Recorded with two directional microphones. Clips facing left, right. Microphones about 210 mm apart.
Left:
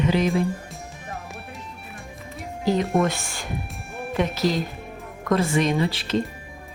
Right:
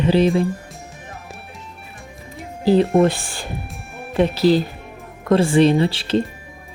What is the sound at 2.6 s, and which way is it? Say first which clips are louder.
Speech: right 7 dB; 30° right (ahead or behind).